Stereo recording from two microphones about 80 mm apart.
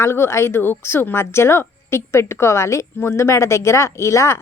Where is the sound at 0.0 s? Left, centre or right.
Left.